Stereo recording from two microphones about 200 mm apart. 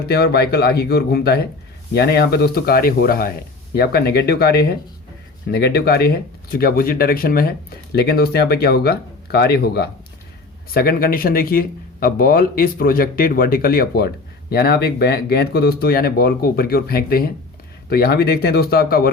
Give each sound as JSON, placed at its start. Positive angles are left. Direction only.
{"t": 0.1, "sound": "speech", "side_deg": 55}